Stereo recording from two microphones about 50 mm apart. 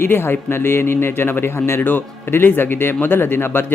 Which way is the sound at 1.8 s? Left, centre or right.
Left.